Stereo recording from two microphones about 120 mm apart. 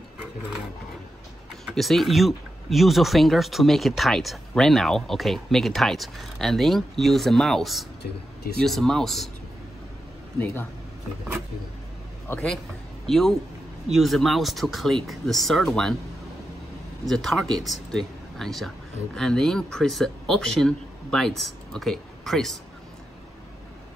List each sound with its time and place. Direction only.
1.8 s speech: centre (ahead or behind)
10.4 s speech: 15° left (ahead or behind)
13.0 s speech: centre (ahead or behind)
17.0 s speech: centre (ahead or behind)